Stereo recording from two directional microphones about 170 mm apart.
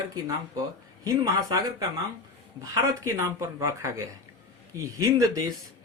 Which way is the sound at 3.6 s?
15° right (ahead or behind).